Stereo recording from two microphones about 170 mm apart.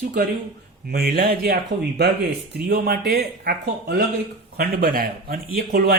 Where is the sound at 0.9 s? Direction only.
65° right (ahead or behind).